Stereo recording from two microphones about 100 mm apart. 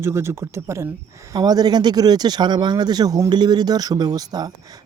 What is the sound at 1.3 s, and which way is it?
Speech, 40° right (ahead or behind).